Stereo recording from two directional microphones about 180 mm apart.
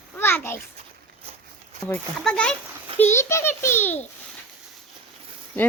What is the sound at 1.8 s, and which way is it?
Speech, 5° left (ahead or behind).